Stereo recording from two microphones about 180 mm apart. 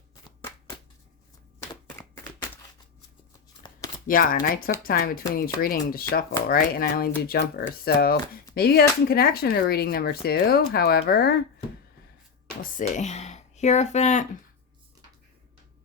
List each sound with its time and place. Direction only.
4.0 s speech: 50° left (ahead or behind)
12.6 s speech: 45° left (ahead or behind)